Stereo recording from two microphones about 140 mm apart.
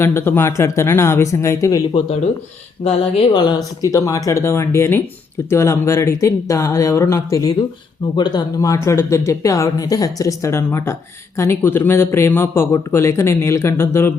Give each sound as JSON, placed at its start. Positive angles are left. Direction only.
{"t": 0.0, "sound": "speech", "side_deg": 15}
{"t": 3.3, "sound": "a man's voice", "side_deg": 30}